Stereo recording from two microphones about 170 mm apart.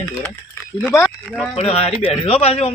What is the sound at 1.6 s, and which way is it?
Speech, 35° left (ahead or behind).